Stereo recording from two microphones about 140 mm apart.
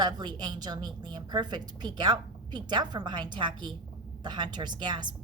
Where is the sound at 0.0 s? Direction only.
30° right (ahead or behind).